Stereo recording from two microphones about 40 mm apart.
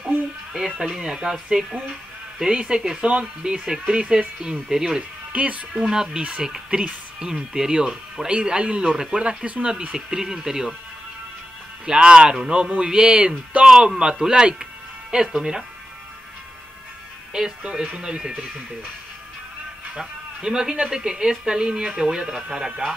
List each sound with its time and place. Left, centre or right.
0.5 s speech: centre
4.6 s speech: centre
5.3 s speech: right
5.7 s speech: centre; by 9.8 s right
9.9 s speech: centre
11.8 s speech: right
17.3 s speech: right
20.0 s a man's voice: centre